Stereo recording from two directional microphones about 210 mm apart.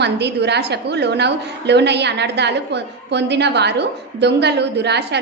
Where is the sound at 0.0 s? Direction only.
55° right (ahead or behind).